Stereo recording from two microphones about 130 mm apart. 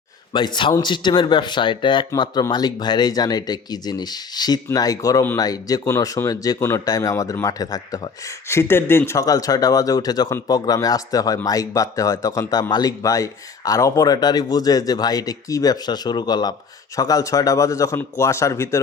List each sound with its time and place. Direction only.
0.3 s speech: 35° left (ahead or behind)